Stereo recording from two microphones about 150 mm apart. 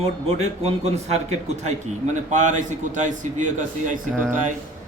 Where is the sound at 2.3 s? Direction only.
55° right (ahead or behind).